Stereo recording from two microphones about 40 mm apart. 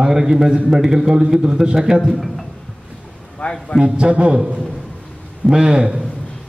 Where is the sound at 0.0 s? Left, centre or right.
Centre.